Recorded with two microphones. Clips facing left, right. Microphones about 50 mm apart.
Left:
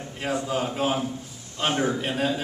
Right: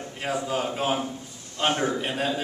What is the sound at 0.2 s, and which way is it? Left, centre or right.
A man's voice, centre.